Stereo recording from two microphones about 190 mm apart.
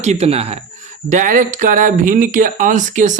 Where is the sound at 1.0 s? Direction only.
40° right (ahead or behind).